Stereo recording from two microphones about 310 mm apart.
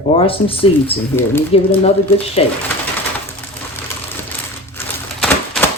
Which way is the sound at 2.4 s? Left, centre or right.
Centre.